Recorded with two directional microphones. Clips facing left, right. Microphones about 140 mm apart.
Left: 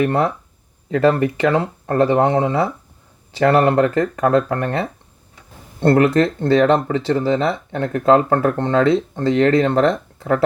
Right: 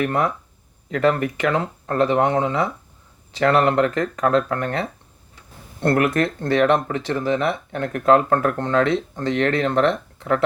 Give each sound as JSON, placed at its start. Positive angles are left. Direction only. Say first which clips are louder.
{"t": 0.0, "sound": "speech", "louder": "left 4 dB", "side_deg": 30}